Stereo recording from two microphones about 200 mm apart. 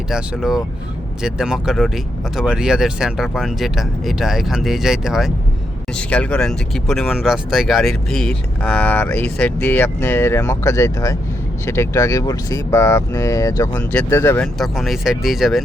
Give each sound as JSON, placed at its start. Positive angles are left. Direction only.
{"t": 0.1, "sound": "speech", "side_deg": 0}